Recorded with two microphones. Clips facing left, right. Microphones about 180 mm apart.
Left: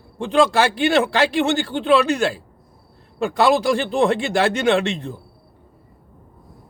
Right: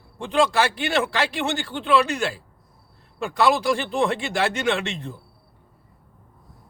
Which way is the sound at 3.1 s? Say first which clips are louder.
Left 4 dB; 30° left (ahead or behind).